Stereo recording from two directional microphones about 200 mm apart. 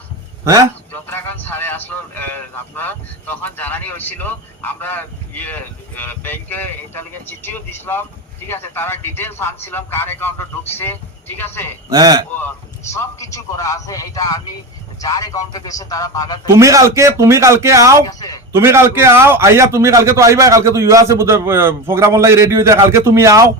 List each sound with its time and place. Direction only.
0.4 s a man's voice: 15° right (ahead or behind)
1.5 s speech: 10° left (ahead or behind)
11.9 s a man's voice: 20° right (ahead or behind)
12.4 s speech: 15° left (ahead or behind)
16.5 s a man's voice: 15° right (ahead or behind)
18.0 s a sound: 20° left (ahead or behind)
18.5 s a man's voice: 15° right (ahead or behind)